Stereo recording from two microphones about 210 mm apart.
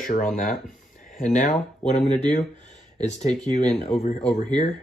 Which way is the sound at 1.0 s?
40° left (ahead or behind).